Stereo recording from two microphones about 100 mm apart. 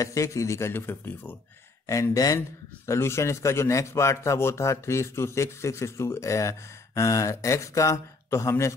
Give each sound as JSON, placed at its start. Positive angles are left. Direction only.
{"t": 0.0, "sound": "a man's voice", "side_deg": 35}
{"t": 1.9, "sound": "a man's voice", "side_deg": 35}